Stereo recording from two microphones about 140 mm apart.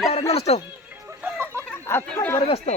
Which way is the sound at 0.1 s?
45° left (ahead or behind).